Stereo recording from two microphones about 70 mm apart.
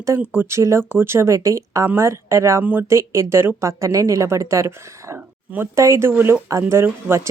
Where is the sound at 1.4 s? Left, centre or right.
Right.